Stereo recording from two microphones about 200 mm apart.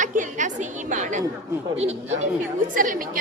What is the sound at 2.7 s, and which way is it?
Speech, 40° right (ahead or behind).